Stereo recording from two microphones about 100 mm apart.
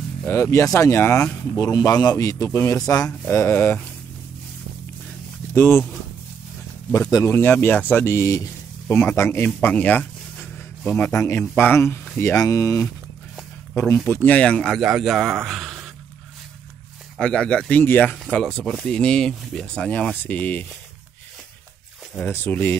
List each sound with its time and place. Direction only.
0.3 s a man's voice: 25° left (ahead or behind)
1.9 s a man's voice: 40° left (ahead or behind)
5.5 s speech: 20° left (ahead or behind)
6.9 s a man's voice: 35° left (ahead or behind)
7.2 s a man's voice: 20° left (ahead or behind)
9.6 s music: 15° left (ahead or behind)
10.8 s a man's voice: 10° left (ahead or behind)
11.1 s a man's voice: 30° left (ahead or behind)
12.4 s a man's voice: 35° left (ahead or behind)
14.0 s speech: 20° left (ahead or behind); by 15.3 s 5° right (ahead or behind)
15.4 s a sound: centre (ahead or behind)
17.2 s speech: 10° left (ahead or behind)
18.3 s speech: 5° left (ahead or behind)
22.2 s a man's voice: 20° left (ahead or behind)